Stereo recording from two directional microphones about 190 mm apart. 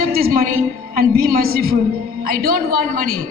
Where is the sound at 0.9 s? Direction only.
50° right (ahead or behind).